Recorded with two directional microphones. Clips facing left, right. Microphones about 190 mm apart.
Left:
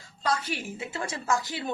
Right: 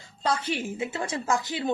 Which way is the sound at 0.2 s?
25° right (ahead or behind).